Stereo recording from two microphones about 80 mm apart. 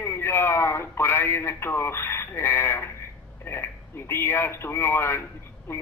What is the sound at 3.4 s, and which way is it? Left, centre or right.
Speech, left.